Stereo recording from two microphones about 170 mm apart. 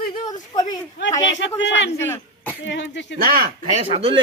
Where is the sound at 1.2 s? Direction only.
90° left.